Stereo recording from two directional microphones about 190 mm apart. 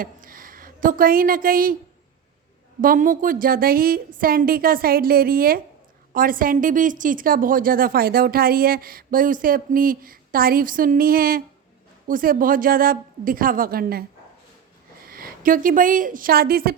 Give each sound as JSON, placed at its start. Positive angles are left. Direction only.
{"t": 0.0, "sound": "a woman's voice", "side_deg": -45}
{"t": 2.8, "sound": "a woman's voice", "side_deg": -45}
{"t": 15.0, "sound": "a woman's voice", "side_deg": -50}